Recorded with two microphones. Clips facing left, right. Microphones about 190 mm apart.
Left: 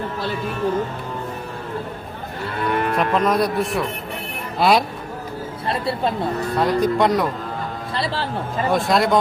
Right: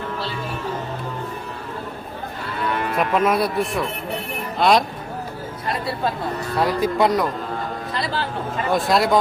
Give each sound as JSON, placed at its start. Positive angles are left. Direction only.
{"t": 3.0, "sound": "speech", "side_deg": -5}
{"t": 5.6, "sound": "speech", "side_deg": 25}
{"t": 6.6, "sound": "speech", "side_deg": -5}
{"t": 7.9, "sound": "speech", "side_deg": 30}
{"t": 8.7, "sound": "speech", "side_deg": 0}